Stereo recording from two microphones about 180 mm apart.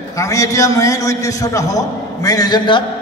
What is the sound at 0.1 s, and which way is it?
A man's voice, 20° left (ahead or behind).